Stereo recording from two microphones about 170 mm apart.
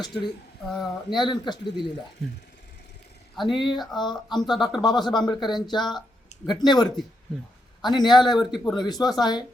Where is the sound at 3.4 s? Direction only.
25° left (ahead or behind).